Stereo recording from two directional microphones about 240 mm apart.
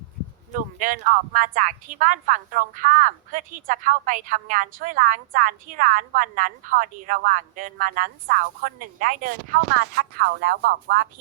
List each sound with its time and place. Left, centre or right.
0.5 s a woman's voice: right